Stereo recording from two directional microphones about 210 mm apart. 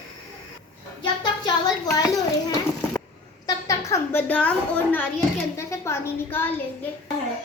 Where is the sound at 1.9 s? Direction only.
20° left (ahead or behind).